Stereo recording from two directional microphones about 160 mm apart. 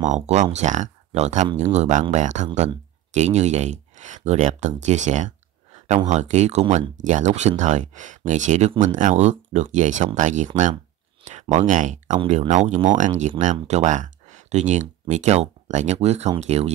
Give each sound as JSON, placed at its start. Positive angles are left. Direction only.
{"t": 0.0, "sound": "speech", "side_deg": -50}